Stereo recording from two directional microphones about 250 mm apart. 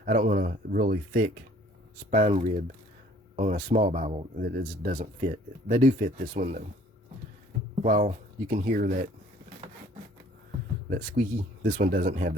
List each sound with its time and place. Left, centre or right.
0.0 s speech: right
7.8 s speech: right
11.6 s speech: right